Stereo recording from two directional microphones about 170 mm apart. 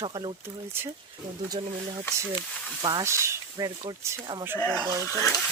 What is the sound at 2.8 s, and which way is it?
Speech, 20° right (ahead or behind).